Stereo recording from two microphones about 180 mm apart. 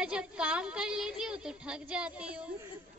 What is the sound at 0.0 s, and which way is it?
Child singing, 5° right (ahead or behind).